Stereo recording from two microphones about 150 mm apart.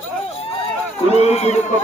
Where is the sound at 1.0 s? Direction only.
45° left (ahead or behind).